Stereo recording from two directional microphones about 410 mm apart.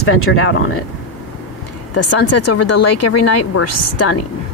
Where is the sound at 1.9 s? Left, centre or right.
Left.